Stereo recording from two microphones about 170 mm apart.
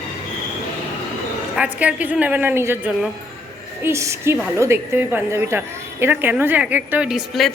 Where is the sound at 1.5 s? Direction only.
10° right (ahead or behind).